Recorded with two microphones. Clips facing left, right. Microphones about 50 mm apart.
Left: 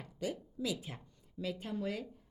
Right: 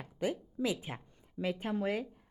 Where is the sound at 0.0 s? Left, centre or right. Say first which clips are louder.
Right 4 dB; right.